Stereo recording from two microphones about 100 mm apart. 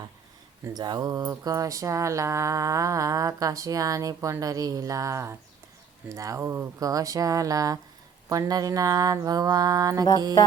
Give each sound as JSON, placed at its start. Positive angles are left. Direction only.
{"t": 0.6, "sound": "speech", "side_deg": -40}